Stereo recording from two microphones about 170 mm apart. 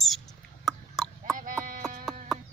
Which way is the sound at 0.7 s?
Centre (ahead or behind).